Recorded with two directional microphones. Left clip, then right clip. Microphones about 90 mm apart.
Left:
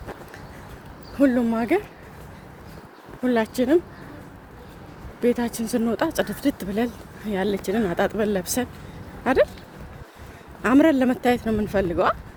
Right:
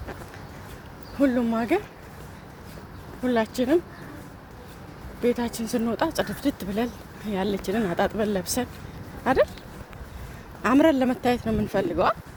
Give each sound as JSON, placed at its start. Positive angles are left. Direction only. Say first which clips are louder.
{"t": 1.2, "sound": "speech", "louder": "left 3 dB", "side_deg": 70}
{"t": 3.2, "sound": "speech", "louder": "left 2 dB", "side_deg": 65}
{"t": 5.2, "sound": "speech", "louder": "left 2 dB", "side_deg": 70}
{"t": 10.6, "sound": "speech", "louder": "left 2 dB", "side_deg": 65}